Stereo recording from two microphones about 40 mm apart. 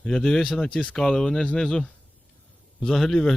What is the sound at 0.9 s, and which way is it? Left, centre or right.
A man's voice, centre.